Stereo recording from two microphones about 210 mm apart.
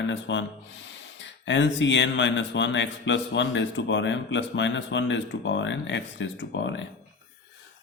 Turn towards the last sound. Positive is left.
turn(degrees=60)  # may be behind; listen again after turning